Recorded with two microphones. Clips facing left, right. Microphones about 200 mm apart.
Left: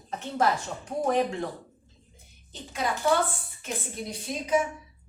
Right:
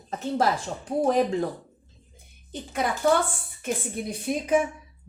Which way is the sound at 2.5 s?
55° right (ahead or behind).